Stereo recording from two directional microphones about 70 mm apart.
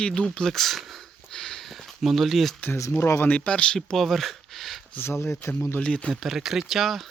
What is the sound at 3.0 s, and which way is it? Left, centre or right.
Speech, left.